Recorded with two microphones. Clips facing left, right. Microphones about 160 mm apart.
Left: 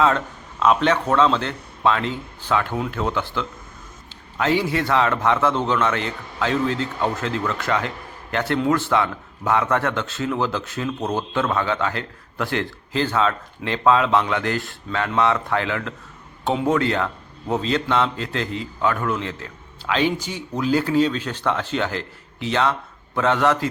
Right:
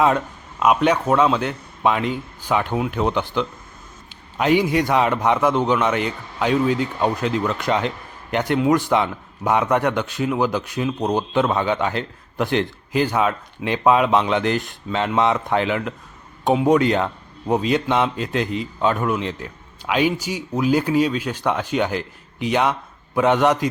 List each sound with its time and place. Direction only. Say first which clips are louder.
0.6 s a man's voice: right 1 dB; 10° right (ahead or behind)